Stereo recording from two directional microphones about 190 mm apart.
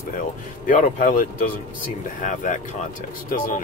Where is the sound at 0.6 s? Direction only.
40° left (ahead or behind).